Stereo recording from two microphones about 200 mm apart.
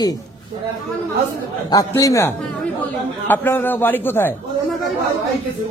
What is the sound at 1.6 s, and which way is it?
A man's voice, 15° left (ahead or behind).